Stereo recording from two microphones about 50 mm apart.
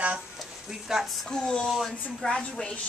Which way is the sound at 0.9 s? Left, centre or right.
Centre.